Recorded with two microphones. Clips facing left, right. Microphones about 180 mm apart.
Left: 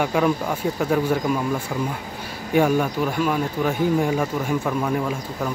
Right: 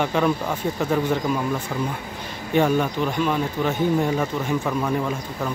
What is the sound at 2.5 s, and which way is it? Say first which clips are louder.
Speech: left 1 dB; 10° left (ahead or behind).